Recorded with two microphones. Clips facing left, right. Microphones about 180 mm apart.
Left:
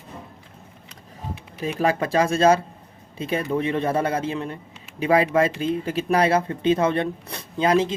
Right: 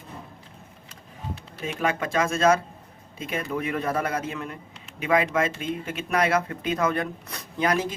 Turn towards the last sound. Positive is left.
turn(degrees=25)  # may be behind; listen again after turning